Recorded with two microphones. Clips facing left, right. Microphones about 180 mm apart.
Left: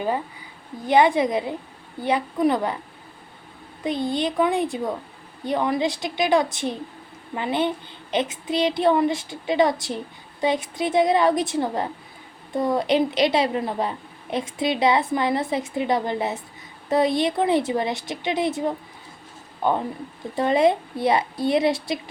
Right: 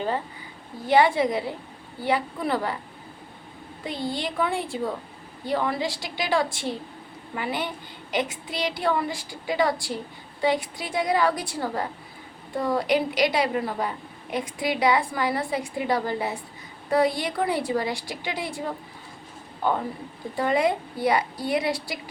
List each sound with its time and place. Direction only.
0.9 s a woman's voice: 20° left (ahead or behind)
3.8 s a woman's voice: 20° left (ahead or behind)